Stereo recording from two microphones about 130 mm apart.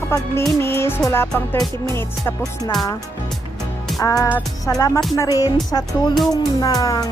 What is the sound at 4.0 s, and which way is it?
Music, 25° left (ahead or behind).